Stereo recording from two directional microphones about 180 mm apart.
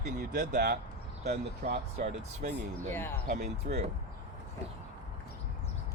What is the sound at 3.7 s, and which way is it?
Speech, 50° right (ahead or behind).